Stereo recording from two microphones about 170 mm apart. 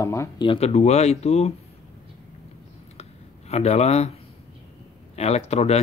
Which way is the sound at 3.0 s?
40° left (ahead or behind).